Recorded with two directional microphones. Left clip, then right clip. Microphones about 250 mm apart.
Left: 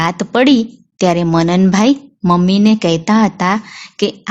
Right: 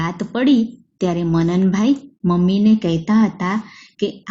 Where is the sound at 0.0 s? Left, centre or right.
Left.